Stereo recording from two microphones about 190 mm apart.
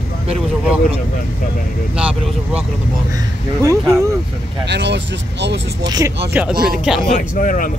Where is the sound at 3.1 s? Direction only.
15° right (ahead or behind).